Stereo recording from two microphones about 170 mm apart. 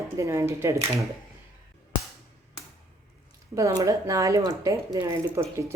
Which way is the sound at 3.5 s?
20° right (ahead or behind).